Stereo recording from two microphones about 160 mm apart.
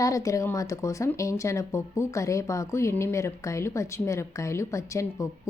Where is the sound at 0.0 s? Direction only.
20° left (ahead or behind).